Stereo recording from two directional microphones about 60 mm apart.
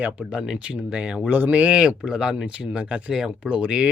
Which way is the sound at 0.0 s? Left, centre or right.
Centre.